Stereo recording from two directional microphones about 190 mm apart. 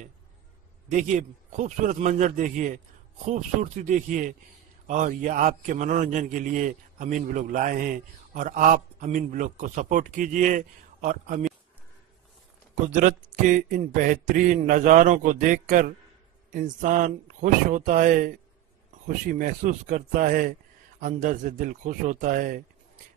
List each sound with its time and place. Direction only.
0.8 s a man's voice: 40° right (ahead or behind)
12.9 s a man's voice: 45° right (ahead or behind)